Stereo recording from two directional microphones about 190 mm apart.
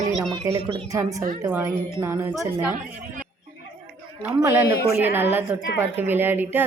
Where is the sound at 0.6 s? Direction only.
25° right (ahead or behind).